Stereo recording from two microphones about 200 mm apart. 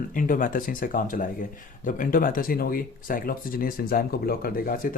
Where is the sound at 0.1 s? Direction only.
45° left (ahead or behind).